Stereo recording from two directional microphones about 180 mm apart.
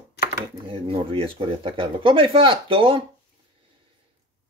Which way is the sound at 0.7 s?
30° right (ahead or behind).